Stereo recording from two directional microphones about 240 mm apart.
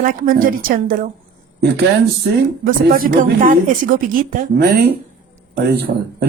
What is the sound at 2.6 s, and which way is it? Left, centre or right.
A man's voice, right.